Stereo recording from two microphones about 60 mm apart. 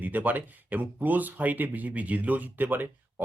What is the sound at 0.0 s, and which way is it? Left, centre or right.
Speech, right.